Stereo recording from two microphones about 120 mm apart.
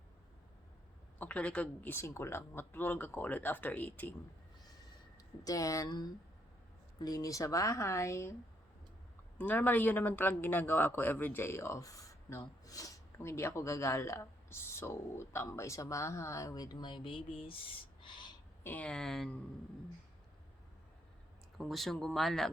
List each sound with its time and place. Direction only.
1.2 s speech: 10° left (ahead or behind)
5.4 s speech: 30° left (ahead or behind)
9.4 s speech: 15° left (ahead or behind); by 18.3 s 40° left (ahead or behind)
18.6 s speech: 10° left (ahead or behind)
21.6 s speech: centre (ahead or behind)